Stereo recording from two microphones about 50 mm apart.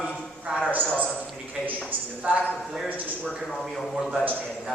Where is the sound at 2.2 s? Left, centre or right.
Right.